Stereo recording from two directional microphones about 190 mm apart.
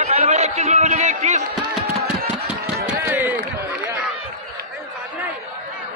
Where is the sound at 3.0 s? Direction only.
10° right (ahead or behind).